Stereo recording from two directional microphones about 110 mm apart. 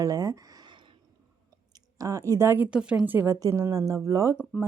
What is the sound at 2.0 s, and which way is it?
Speech, 30° right (ahead or behind).